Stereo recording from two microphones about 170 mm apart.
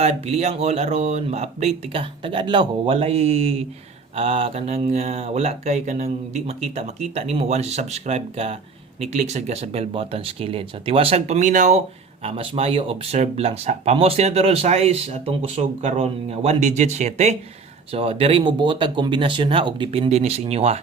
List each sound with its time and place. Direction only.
0.0 s speech: 40° right (ahead or behind)
12.2 s speech: 35° right (ahead or behind)